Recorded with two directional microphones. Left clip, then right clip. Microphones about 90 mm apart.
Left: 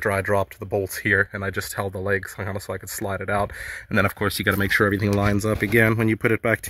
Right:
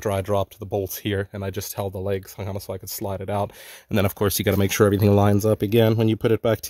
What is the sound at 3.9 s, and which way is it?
Speech, 65° right (ahead or behind).